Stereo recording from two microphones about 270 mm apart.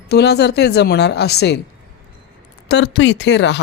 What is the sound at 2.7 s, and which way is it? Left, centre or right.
Speech, left.